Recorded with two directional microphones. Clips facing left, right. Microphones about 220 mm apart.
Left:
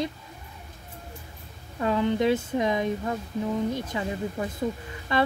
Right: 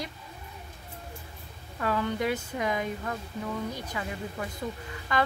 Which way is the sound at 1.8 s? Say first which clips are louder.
Left 5 dB; 20° left (ahead or behind).